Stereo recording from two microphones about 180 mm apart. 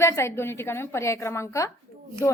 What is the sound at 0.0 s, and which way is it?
A woman's voice, 15° left (ahead or behind).